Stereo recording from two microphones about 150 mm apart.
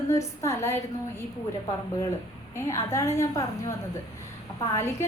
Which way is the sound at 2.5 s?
20° left (ahead or behind).